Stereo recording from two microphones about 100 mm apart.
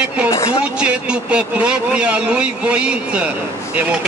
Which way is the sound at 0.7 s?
10° right (ahead or behind).